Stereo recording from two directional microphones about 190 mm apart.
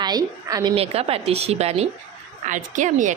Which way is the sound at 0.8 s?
30° right (ahead or behind).